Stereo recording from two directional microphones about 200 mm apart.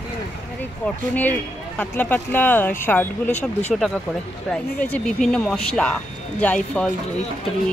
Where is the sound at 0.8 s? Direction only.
10° left (ahead or behind).